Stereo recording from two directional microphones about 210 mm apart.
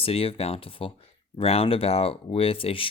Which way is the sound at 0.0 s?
25° left (ahead or behind).